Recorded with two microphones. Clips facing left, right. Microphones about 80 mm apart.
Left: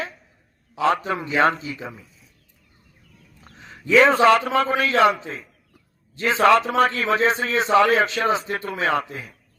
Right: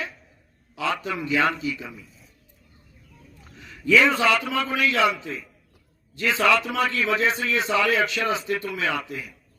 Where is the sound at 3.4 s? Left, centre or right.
Left.